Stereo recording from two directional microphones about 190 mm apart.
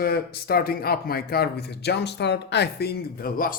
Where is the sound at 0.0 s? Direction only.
55° left (ahead or behind).